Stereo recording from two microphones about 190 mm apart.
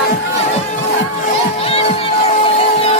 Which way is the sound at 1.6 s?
30° left (ahead or behind).